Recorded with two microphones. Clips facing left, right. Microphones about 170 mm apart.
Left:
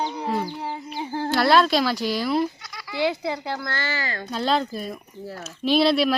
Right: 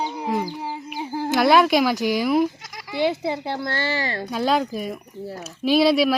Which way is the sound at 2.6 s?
45° right (ahead or behind).